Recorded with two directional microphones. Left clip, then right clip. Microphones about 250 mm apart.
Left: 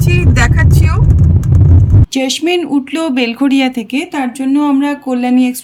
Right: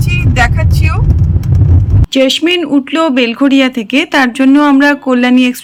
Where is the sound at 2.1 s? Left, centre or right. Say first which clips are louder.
Right 5 dB; centre.